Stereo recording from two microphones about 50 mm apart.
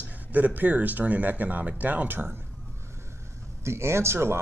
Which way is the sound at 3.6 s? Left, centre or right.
Right.